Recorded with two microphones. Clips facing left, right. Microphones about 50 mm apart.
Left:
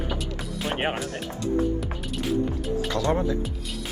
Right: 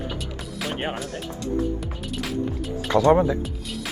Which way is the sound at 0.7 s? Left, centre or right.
Left.